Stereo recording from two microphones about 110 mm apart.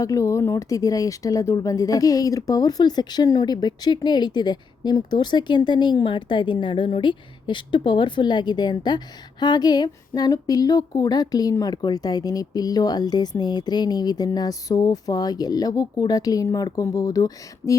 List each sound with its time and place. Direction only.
0.0 s speech: 30° left (ahead or behind)